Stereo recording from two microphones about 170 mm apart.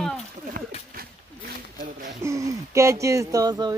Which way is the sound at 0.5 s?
55° right (ahead or behind).